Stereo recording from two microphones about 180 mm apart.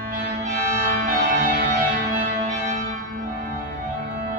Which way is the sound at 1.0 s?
50° right (ahead or behind).